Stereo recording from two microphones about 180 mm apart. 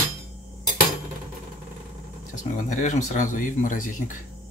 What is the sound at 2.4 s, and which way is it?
Speech, 45° left (ahead or behind).